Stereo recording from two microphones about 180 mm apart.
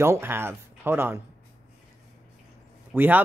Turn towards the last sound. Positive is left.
turn(degrees=-10)  # may be behind; listen again after turning